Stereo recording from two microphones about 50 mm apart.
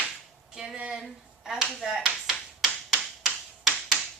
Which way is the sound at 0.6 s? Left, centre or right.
Centre.